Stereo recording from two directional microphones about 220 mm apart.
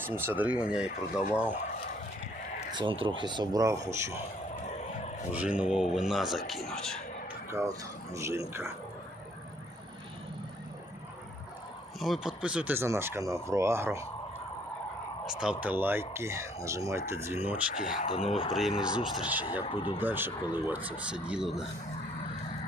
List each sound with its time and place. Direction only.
0.0 s speech: 10° right (ahead or behind)
2.7 s speech: 25° right (ahead or behind)
5.3 s speech: 5° right (ahead or behind)
7.5 s speech: 15° right (ahead or behind)
11.9 s speech: centre (ahead or behind)
15.3 s speech: 5° right (ahead or behind)
18.0 s speech: 25° left (ahead or behind)
18.9 s speech: centre (ahead or behind)
19.7 s speech: 20° left (ahead or behind)
20.0 s speech: 10° right (ahead or behind)